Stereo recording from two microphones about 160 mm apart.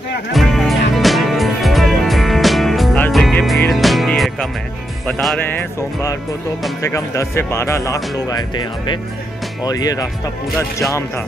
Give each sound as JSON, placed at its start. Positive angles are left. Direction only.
{"t": 0.3, "sound": "music", "side_deg": 0}
{"t": 5.0, "sound": "speech", "side_deg": 5}